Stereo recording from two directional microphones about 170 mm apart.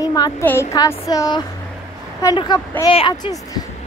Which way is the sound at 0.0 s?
20° left (ahead or behind).